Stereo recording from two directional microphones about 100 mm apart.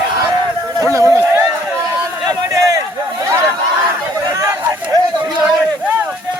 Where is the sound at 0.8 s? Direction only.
30° right (ahead or behind).